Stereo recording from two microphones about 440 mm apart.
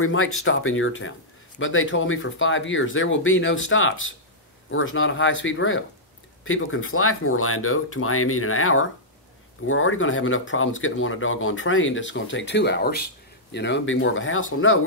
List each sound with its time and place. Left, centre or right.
0.0 s speech: left